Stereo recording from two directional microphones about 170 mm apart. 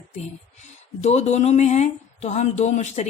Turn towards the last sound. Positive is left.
turn(degrees=40)  # may be behind; listen again after turning